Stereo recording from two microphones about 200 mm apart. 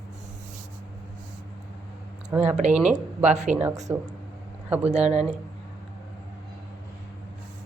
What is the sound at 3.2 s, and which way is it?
Speech, 35° right (ahead or behind).